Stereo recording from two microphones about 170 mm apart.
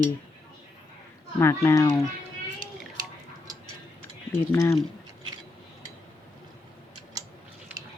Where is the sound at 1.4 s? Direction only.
15° left (ahead or behind).